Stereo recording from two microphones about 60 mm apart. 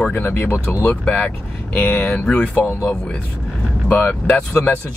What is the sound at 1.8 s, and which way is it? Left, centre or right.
Speech, left.